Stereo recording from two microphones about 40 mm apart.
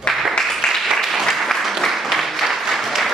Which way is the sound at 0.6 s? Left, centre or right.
Centre.